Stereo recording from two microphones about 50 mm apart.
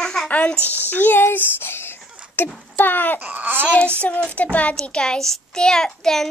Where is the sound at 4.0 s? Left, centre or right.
Left; by 6.3 s centre.